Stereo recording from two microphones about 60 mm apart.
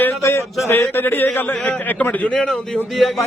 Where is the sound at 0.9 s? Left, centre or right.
Left.